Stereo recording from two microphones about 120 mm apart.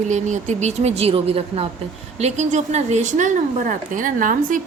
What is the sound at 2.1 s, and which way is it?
Speech, 70° right (ahead or behind).